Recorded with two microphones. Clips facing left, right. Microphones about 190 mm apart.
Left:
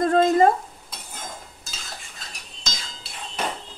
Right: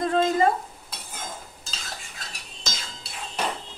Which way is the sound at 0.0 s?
45° left (ahead or behind).